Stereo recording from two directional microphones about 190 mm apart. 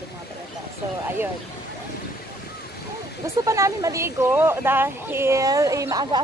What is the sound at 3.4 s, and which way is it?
Speech, 15° right (ahead or behind).